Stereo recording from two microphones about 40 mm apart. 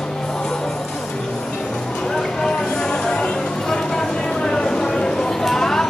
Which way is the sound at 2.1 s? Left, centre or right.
Centre.